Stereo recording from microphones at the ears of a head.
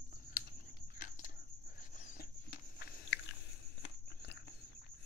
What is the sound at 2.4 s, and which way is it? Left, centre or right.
Biting, left.